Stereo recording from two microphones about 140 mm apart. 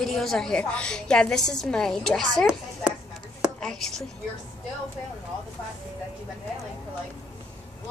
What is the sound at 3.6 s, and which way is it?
Speech, 5° left (ahead or behind).